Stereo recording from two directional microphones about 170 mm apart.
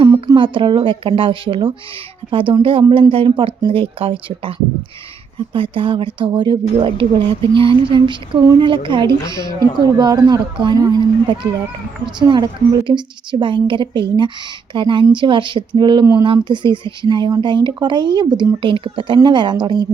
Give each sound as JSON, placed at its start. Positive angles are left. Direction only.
{"t": 0.0, "sound": "a woman's voice", "side_deg": -25}